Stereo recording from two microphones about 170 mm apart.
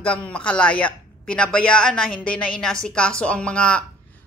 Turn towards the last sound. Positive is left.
turn(degrees=5)  # may be behind; listen again after turning